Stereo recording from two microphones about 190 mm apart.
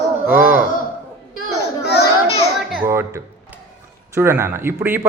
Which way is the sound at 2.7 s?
10° right (ahead or behind).